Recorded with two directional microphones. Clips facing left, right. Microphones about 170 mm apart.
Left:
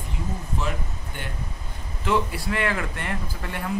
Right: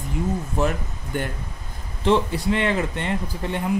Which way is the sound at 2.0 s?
25° right (ahead or behind).